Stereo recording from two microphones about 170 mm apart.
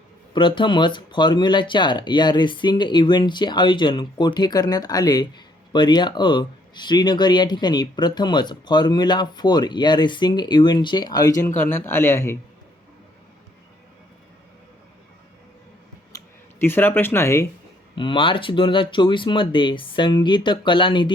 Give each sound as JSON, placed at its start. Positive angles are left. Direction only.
{"t": 0.3, "sound": "speech", "side_deg": 30}
{"t": 16.1, "sound": "speech", "side_deg": 10}
{"t": 17.9, "sound": "speech", "side_deg": 30}